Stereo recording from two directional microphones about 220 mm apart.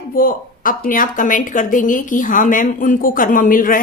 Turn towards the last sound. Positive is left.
turn(degrees=40)  # may be behind; listen again after turning